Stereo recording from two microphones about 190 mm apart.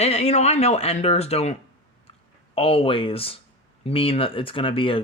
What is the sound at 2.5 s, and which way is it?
Speech, 30° left (ahead or behind).